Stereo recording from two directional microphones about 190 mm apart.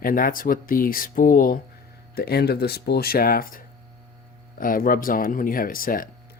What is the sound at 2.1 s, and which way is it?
Speech, 55° left (ahead or behind).